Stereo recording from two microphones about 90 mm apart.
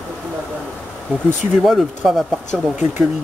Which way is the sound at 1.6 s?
5° right (ahead or behind).